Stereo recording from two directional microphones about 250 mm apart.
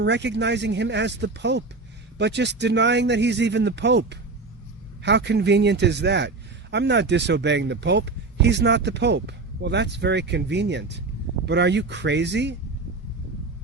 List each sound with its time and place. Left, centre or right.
0.0 s a man's voice: right